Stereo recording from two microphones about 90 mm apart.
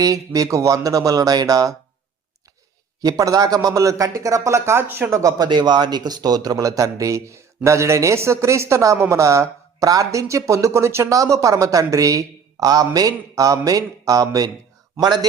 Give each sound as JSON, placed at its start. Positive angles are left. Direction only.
{"t": 0.0, "sound": "a man's voice", "side_deg": -40}
{"t": 3.0, "sound": "a man's voice", "side_deg": -40}
{"t": 5.5, "sound": "a man's voice", "side_deg": -55}